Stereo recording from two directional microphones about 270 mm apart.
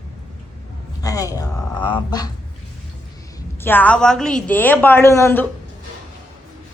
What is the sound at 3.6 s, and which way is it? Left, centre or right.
A woman's voice, centre.